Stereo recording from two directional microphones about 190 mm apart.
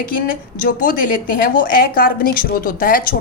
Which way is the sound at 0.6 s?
45° left (ahead or behind).